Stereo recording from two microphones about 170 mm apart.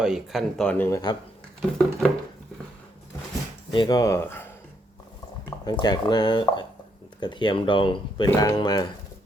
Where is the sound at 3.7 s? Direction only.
25° left (ahead or behind).